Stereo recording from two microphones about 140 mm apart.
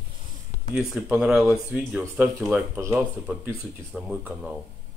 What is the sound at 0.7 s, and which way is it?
Speech, 5° right (ahead or behind).